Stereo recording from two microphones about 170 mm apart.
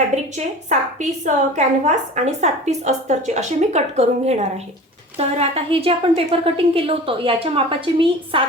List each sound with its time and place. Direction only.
0.1 s a woman's voice: 45° right (ahead or behind)